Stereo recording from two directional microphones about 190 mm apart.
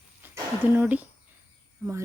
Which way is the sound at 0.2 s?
10° right (ahead or behind).